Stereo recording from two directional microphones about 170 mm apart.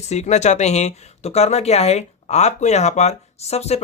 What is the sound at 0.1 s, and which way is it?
Speech, 40° left (ahead or behind).